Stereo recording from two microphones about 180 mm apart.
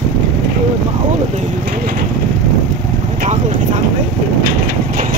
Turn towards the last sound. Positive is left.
turn(degrees=-40)  # may be behind; listen again after turning